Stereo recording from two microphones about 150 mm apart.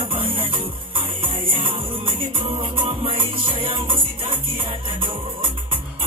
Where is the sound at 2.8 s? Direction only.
40° right (ahead or behind).